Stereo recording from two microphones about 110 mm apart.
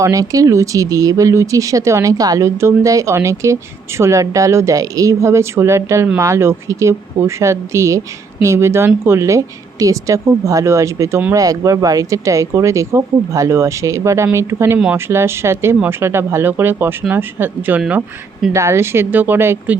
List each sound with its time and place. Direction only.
0.0 s speech: 30° right (ahead or behind); by 18.0 s 15° right (ahead or behind)
18.5 s speech: 25° right (ahead or behind)